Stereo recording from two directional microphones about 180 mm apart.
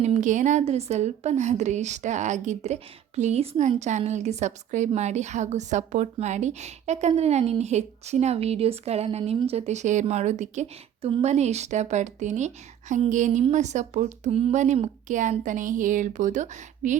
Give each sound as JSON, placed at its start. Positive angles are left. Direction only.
{"t": 0.0, "sound": "a woman's voice", "side_deg": -40}